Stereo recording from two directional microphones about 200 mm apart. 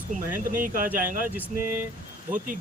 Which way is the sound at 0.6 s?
45° right (ahead or behind).